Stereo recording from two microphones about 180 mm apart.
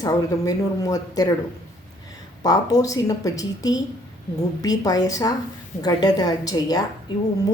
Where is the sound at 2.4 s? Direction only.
20° left (ahead or behind).